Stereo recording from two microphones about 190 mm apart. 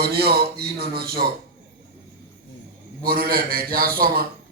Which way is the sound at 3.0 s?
50° right (ahead or behind).